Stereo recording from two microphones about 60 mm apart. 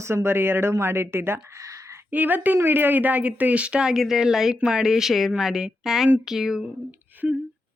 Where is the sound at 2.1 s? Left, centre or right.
Right; by 6.6 s centre.